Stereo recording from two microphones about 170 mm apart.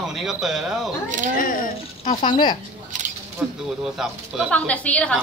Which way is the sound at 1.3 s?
55° left (ahead or behind).